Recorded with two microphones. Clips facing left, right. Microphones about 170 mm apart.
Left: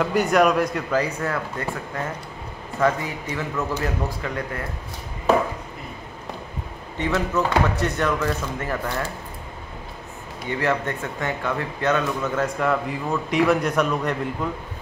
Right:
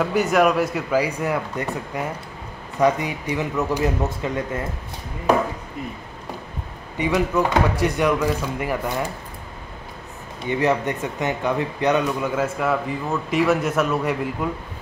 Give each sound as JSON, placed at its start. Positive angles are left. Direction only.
{"t": 0.0, "sound": "speech", "side_deg": 0}
{"t": 7.0, "sound": "speech", "side_deg": -10}
{"t": 10.5, "sound": "speech", "side_deg": -20}